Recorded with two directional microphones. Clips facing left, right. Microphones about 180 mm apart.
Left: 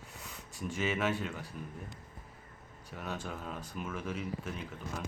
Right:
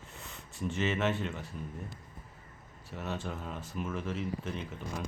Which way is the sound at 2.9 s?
Centre (ahead or behind).